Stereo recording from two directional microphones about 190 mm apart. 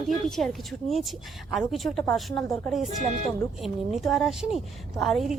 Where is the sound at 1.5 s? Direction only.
Centre (ahead or behind).